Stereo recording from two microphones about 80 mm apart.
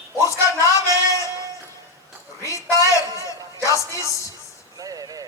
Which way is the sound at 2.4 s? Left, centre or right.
Left.